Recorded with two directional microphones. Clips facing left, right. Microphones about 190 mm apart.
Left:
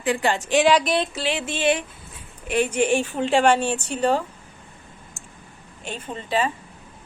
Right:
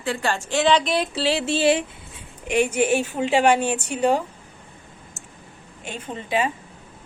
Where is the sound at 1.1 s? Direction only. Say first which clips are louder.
Right 4 dB; 30° right (ahead or behind).